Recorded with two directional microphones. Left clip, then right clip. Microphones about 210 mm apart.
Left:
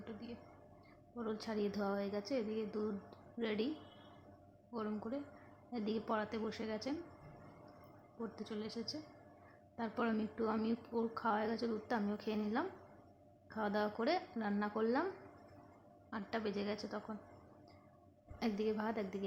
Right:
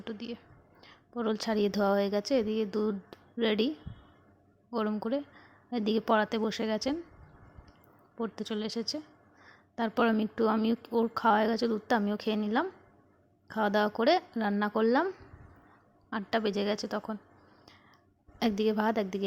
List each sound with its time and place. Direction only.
0.0 s whispering: 40° right (ahead or behind)
1.1 s a woman's voice: 40° right (ahead or behind)
4.7 s a woman's voice: 40° right (ahead or behind)
8.2 s a woman's voice: 40° right (ahead or behind)
18.3 s a woman's voice: 40° right (ahead or behind)